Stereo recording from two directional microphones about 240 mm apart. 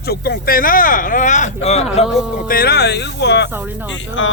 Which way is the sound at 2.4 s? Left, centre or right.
Left.